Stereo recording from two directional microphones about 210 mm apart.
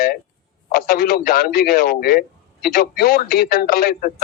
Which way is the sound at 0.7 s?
45° left (ahead or behind).